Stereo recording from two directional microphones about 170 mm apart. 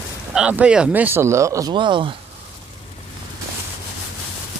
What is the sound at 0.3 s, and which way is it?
Speech, 5° right (ahead or behind).